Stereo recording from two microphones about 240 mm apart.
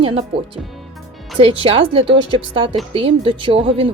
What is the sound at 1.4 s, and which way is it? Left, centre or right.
Speech, right.